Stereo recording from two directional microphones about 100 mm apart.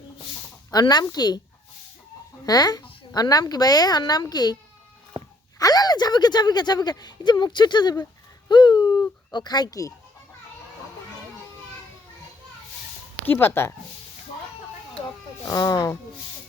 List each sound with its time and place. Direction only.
0.7 s a woman's voice: 40° left (ahead or behind)
2.5 s speech: 40° left (ahead or behind)
5.5 s speech: 40° left (ahead or behind)
8.4 s a sound: 50° left (ahead or behind)
9.6 s speech: 30° left (ahead or behind)
13.2 s a woman's voice: 20° left (ahead or behind)
15.4 s speech: 35° left (ahead or behind)